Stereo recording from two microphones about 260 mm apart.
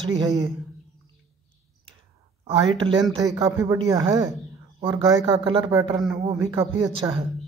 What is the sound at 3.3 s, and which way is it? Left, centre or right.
Speech, centre.